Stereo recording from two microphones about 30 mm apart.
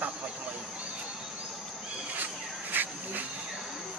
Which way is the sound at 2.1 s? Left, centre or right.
Right.